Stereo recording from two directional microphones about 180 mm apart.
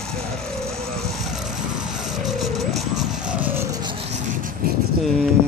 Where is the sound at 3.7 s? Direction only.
25° right (ahead or behind).